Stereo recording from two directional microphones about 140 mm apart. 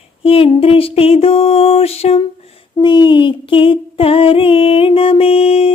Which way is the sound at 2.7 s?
35° left (ahead or behind).